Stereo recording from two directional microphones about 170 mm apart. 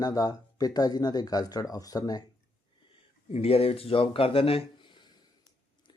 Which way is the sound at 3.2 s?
35° left (ahead or behind).